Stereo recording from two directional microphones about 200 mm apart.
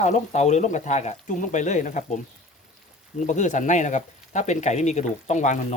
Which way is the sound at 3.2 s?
35° left (ahead or behind).